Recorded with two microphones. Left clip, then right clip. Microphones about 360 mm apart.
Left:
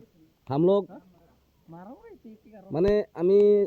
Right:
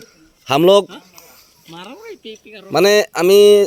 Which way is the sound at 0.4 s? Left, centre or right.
Centre.